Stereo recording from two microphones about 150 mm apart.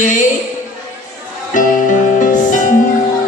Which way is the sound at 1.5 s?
60° left (ahead or behind).